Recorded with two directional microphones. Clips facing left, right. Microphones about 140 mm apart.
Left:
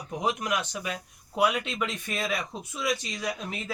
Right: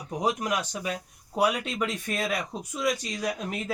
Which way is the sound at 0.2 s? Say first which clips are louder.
Right 1 dB; 40° right (ahead or behind).